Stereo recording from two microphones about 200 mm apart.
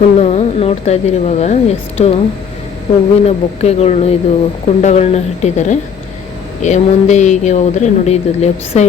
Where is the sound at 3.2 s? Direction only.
30° left (ahead or behind).